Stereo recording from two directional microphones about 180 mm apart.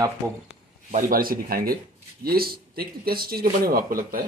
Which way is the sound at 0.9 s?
50° right (ahead or behind).